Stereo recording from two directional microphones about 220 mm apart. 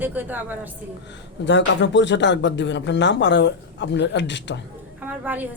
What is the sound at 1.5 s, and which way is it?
Speech, 55° left (ahead or behind).